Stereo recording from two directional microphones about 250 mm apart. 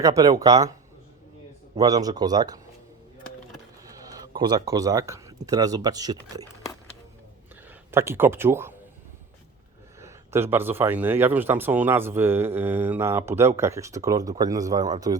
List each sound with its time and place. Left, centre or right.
0.0 s speech: centre
1.7 s speech: centre
4.0 s speech: centre
7.7 s speech: centre
10.0 s speech: centre